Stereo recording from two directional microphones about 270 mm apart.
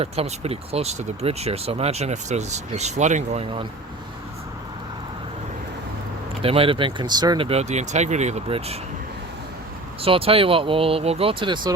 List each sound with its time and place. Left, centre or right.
0.0 s speech: right
6.4 s speech: right
10.0 s speech: right